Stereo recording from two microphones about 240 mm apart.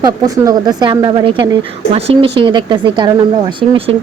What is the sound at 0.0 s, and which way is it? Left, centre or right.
A woman's voice, centre.